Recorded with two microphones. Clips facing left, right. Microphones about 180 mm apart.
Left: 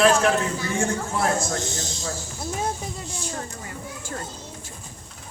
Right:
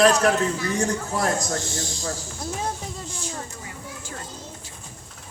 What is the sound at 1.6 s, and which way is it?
Speech, 20° left (ahead or behind).